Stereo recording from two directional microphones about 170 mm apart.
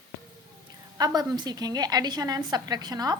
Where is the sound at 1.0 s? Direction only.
25° right (ahead or behind).